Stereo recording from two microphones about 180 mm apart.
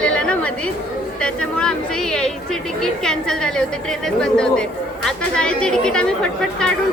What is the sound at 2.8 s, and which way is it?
Speech, 5° left (ahead or behind).